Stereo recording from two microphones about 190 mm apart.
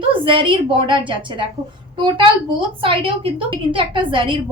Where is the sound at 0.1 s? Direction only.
25° right (ahead or behind).